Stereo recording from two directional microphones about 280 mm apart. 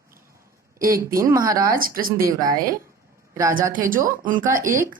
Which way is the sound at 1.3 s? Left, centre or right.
Centre.